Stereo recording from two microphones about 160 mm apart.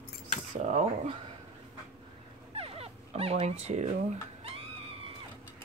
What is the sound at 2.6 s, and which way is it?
Dog, 35° right (ahead or behind).